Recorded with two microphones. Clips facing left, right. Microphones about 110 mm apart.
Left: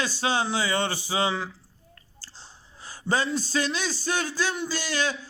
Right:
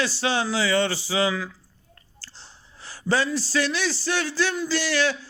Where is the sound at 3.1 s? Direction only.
25° left (ahead or behind).